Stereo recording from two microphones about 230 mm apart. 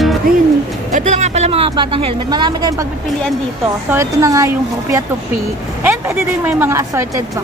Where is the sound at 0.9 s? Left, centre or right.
Right.